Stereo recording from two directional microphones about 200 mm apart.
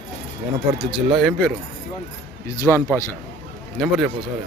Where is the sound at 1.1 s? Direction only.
Centre (ahead or behind).